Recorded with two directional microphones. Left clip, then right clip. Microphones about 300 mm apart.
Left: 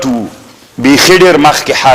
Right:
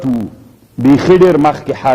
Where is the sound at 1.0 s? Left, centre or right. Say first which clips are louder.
Left 5 dB; centre.